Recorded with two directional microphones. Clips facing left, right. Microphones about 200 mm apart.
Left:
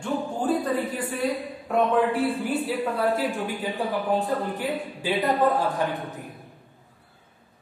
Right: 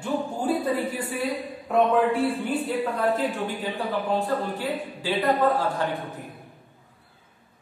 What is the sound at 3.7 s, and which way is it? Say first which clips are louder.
Speech: left 1 dB; 15° left (ahead or behind).